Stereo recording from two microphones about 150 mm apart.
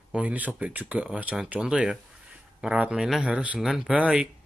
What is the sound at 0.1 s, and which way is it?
Speech, 10° right (ahead or behind).